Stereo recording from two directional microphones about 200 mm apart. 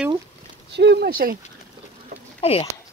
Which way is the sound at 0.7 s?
60° right (ahead or behind).